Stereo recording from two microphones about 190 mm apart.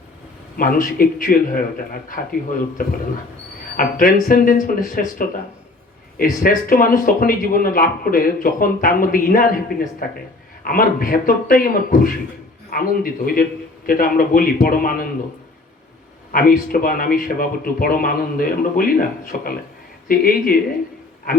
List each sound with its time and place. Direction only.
0.5 s speech: 50° left (ahead or behind)
16.3 s speech: 50° left (ahead or behind)